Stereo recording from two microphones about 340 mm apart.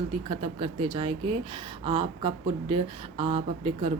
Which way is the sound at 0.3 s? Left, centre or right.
Centre.